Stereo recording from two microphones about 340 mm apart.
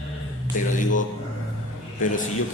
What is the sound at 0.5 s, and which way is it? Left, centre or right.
Speech, left.